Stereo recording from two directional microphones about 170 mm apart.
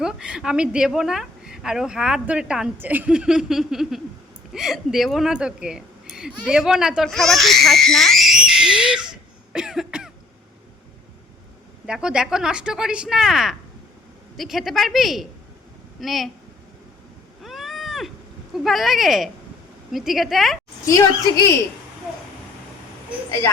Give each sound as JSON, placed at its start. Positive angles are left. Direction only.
{"t": 0.0, "sound": "a woman's voice", "side_deg": -5}
{"t": 11.9, "sound": "a woman's voice", "side_deg": -5}
{"t": 17.4, "sound": "vehicle", "side_deg": 0}
{"t": 18.5, "sound": "a woman's voice", "side_deg": 0}
{"t": 20.8, "sound": "a woman's voice", "side_deg": 20}